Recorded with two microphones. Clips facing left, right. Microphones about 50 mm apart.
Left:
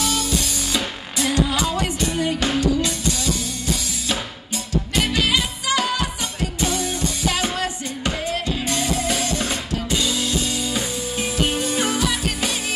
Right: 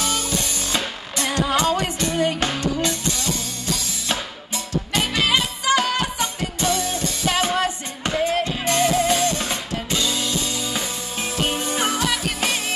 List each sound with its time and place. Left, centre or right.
0.7 s music: right
5.1 s music: right